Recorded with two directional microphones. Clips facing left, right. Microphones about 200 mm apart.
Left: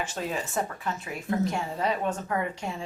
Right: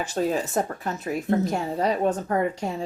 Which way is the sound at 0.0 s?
40° right (ahead or behind).